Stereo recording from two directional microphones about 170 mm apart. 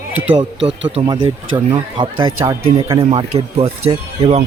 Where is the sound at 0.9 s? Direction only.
30° right (ahead or behind).